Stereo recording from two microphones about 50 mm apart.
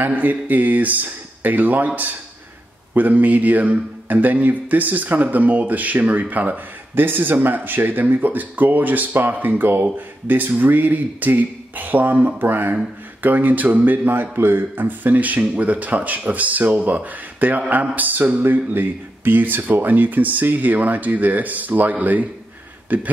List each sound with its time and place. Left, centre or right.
0.0 s speech: right
2.9 s speech: right
12.4 s speech: right
14.0 s speech: right